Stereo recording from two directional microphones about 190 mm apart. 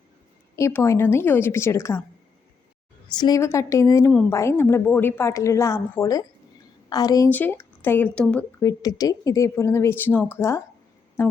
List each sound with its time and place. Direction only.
0.5 s speech: 15° left (ahead or behind)
3.2 s a woman's voice: 20° left (ahead or behind)